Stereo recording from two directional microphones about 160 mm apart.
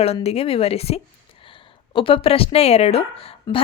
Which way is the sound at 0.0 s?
40° left (ahead or behind).